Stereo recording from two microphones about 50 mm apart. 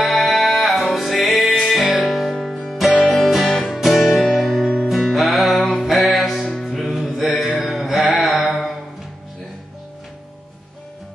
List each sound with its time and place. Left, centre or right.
0.0 s music: centre
8.2 s mantra: centre